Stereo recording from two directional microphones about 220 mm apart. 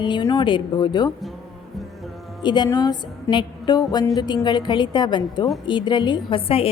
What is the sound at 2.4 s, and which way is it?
A woman's voice, 20° left (ahead or behind).